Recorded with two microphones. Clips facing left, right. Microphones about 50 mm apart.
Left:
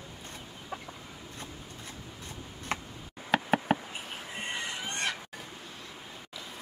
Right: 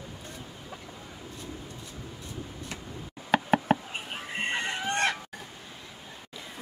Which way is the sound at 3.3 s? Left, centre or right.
Centre.